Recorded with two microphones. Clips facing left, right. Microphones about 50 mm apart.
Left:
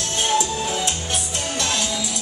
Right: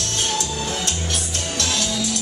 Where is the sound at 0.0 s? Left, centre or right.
Centre.